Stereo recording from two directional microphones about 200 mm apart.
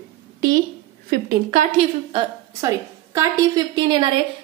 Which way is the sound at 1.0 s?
45° right (ahead or behind).